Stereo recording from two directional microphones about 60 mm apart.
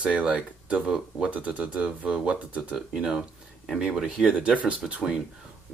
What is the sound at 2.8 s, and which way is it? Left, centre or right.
Speech, centre.